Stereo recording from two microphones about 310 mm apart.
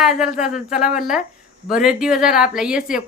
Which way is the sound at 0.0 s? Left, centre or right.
Centre.